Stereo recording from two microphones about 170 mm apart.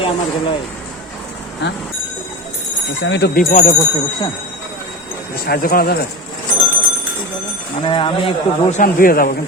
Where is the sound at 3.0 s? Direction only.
85° left; by 3.7 s 55° left (ahead or behind).